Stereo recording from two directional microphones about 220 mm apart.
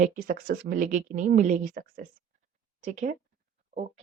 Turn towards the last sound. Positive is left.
turn(degrees=-35)  # may be behind; listen again after turning